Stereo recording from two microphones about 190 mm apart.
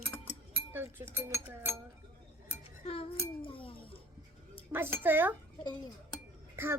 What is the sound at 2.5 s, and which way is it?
Chink, 30° left (ahead or behind).